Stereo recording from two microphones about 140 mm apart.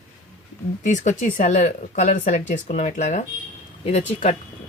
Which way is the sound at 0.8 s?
65° left (ahead or behind).